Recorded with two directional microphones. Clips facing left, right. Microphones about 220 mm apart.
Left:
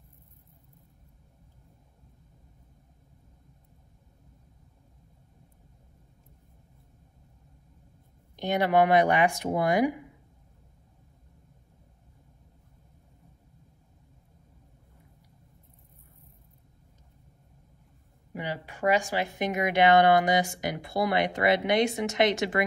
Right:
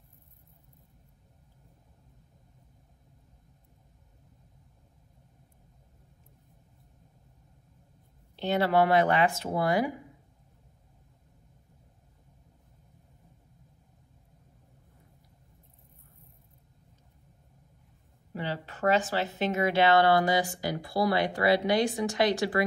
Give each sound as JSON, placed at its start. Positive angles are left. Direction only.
{"t": 8.4, "sound": "speech", "side_deg": 15}
{"t": 18.3, "sound": "speech", "side_deg": 15}